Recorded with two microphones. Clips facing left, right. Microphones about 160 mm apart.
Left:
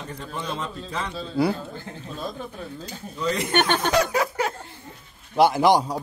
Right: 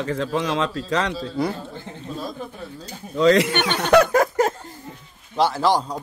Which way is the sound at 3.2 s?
90° right.